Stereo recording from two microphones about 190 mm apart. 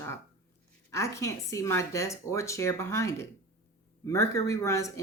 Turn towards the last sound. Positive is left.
turn(degrees=15)  # may be behind; listen again after turning